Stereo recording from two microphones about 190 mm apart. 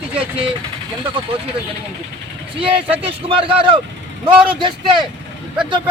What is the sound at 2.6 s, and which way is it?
A man's voice, 30° right (ahead or behind).